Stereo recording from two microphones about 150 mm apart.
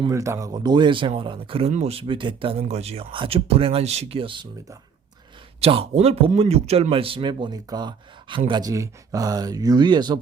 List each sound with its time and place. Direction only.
0.1 s speech: 20° right (ahead or behind)
5.5 s speech: 40° right (ahead or behind)